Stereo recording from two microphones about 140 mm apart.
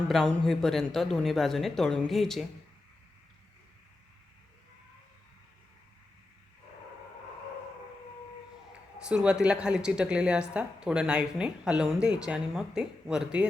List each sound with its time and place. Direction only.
0.1 s speech: centre (ahead or behind)
9.0 s a woman's voice: 5° right (ahead or behind)